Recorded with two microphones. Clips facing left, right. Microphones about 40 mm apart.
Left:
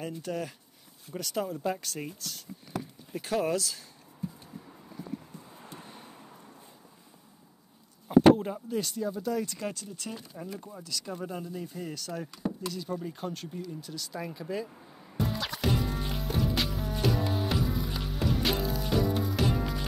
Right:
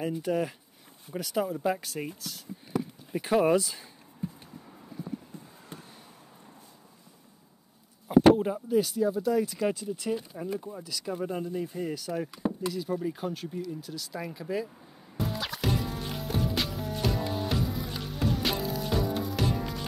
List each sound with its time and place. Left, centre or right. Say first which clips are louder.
0.0 s speech: right 6 dB; centre
2.8 s a sound: right 5 dB; centre
8.1 s speech: even; centre
15.1 s music: even; centre